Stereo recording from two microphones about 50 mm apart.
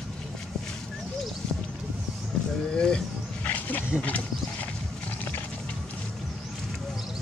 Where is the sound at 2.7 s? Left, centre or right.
Centre.